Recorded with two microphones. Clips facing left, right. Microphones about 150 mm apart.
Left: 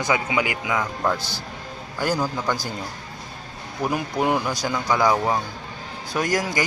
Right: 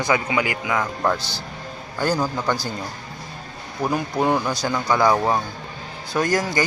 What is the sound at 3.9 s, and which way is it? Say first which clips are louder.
Speech: right 2 dB; 10° left (ahead or behind).